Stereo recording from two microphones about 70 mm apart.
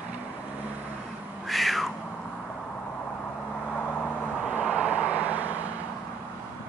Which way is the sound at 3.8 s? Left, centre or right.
Left.